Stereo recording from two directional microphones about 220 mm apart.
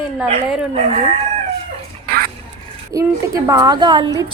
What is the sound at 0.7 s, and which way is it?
Speech, 30° right (ahead or behind).